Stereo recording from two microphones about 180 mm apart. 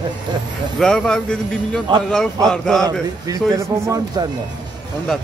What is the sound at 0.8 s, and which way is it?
Speech, 5° left (ahead or behind).